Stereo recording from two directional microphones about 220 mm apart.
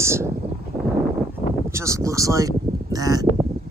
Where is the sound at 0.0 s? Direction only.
10° right (ahead or behind).